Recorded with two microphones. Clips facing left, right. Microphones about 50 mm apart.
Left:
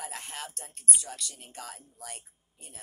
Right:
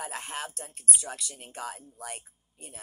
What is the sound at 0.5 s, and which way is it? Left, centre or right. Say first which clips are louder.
Speech: right 1 dB; centre.